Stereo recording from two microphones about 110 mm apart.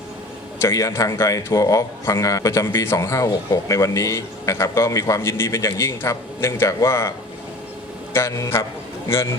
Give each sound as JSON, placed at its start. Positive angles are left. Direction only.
{"t": 0.6, "sound": "a man's voice", "side_deg": 25}
{"t": 8.1, "sound": "a man's voice", "side_deg": 25}